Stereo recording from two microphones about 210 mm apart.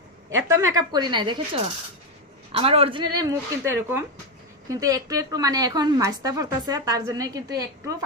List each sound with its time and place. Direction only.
0.3 s speech: 15° right (ahead or behind)
2.5 s a woman's voice: 25° right (ahead or behind)